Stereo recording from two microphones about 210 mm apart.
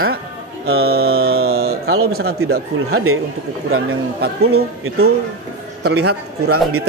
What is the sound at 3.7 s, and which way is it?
Mantra, 50° right (ahead or behind).